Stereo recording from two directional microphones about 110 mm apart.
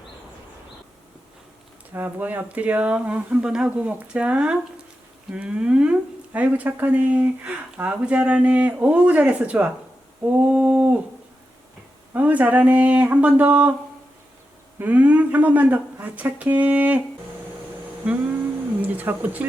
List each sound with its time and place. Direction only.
1.9 s speech: 15° right (ahead or behind)
12.1 s speech: 15° right (ahead or behind)
14.8 s speech: 15° right (ahead or behind)
18.0 s speech: 15° right (ahead or behind)